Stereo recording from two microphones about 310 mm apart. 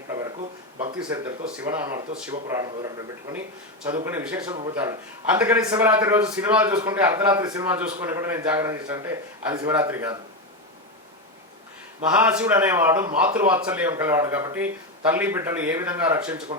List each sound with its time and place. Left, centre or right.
0.1 s a sound: centre
0.9 s a man's voice: centre
12.0 s a man's voice: centre